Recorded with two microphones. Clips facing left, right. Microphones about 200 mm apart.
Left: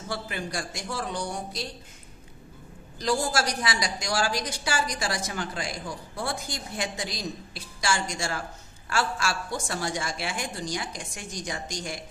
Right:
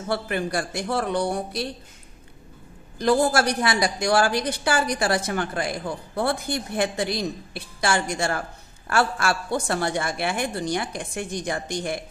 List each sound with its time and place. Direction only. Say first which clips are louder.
0.1 s a woman's voice: right 8 dB; 60° right (ahead or behind)
3.0 s a woman's voice: right 7 dB; 55° right (ahead or behind)